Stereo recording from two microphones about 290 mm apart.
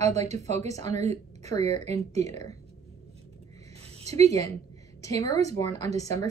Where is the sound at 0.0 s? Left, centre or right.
Right.